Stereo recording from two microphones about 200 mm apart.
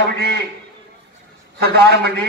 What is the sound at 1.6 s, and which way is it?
Speech, 55° right (ahead or behind).